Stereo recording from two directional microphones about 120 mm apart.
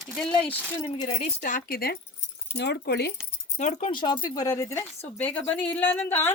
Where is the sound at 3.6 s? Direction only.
85° left.